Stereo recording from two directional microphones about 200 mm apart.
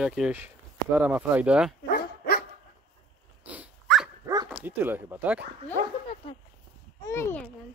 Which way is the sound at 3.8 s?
Centre (ahead or behind).